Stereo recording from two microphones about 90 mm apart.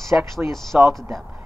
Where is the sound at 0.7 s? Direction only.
Centre (ahead or behind).